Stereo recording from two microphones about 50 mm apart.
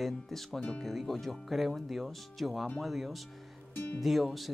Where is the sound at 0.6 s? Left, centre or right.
Centre.